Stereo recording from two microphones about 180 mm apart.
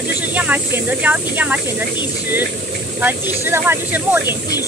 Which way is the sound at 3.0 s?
10° right (ahead or behind).